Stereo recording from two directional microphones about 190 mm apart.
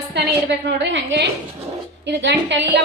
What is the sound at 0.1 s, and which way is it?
A woman's voice, 65° right (ahead or behind).